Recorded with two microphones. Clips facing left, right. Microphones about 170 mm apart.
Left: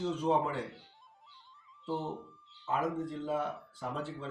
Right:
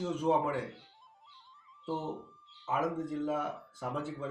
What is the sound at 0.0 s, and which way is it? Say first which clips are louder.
Speech: right 1 dB; 10° right (ahead or behind).